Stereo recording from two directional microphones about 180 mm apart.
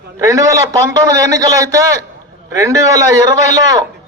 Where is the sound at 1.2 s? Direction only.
20° right (ahead or behind).